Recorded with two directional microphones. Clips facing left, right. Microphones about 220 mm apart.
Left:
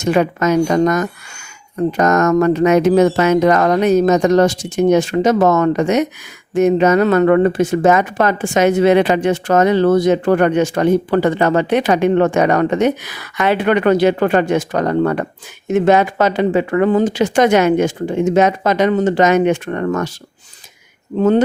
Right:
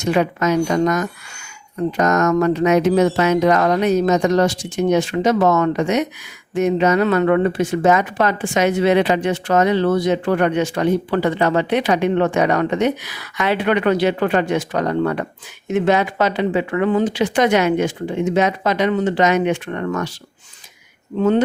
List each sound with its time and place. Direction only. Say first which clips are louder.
0.0 s speech: left 3 dB; 45° left (ahead or behind)
21.2 s speech: left 3 dB; 40° left (ahead or behind)